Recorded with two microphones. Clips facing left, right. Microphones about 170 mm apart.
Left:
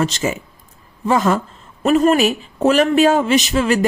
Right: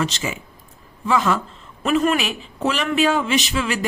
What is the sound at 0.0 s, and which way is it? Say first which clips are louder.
A man's voice: left 5 dB; 45° left (ahead or behind).